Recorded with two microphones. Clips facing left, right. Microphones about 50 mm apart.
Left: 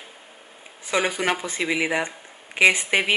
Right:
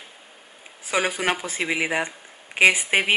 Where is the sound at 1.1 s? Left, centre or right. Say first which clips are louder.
Even; centre.